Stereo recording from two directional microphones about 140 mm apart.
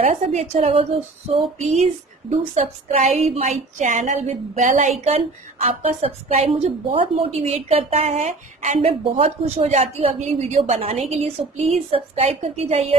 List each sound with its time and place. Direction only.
0.0 s a woman's voice: 50° right (ahead or behind)